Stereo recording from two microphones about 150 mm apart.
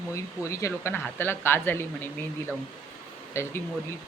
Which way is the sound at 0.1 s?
20° left (ahead or behind).